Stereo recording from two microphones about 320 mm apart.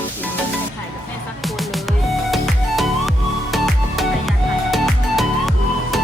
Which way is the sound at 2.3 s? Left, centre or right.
Centre.